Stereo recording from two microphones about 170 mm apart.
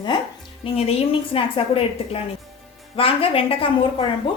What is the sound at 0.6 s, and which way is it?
A woman's voice, 35° left (ahead or behind).